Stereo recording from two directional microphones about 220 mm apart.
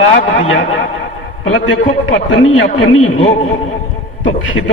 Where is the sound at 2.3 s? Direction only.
65° left (ahead or behind).